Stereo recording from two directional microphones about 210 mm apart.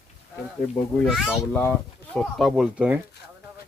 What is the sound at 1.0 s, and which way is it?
Speech, centre (ahead or behind).